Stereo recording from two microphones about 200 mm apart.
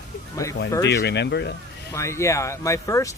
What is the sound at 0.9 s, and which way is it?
Speech, 60° left (ahead or behind).